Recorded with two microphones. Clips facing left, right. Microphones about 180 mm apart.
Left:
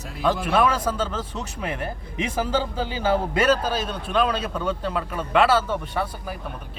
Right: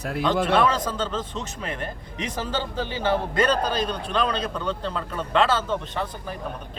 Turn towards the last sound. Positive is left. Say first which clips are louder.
# left 2 dB
turn(degrees=10)  # may be behind; listen again after turning